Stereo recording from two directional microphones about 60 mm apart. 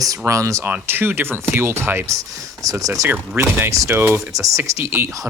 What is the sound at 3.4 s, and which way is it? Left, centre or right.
Speech, right.